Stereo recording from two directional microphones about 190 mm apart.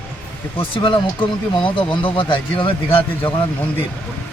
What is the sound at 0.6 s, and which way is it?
Speech, 25° left (ahead or behind).